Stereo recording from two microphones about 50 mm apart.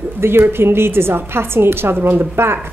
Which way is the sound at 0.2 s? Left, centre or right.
Right.